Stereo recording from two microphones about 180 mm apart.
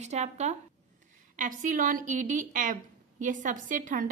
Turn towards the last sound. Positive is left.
turn(degrees=-45)  # may be behind; listen again after turning